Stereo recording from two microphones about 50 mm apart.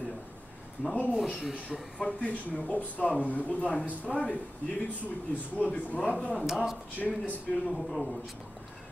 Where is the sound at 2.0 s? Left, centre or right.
Left.